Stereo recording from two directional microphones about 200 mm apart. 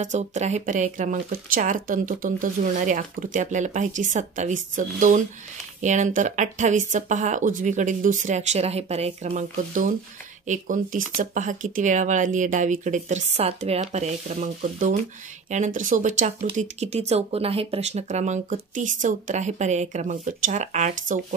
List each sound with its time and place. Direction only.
0.0 s speech: 35° right (ahead or behind)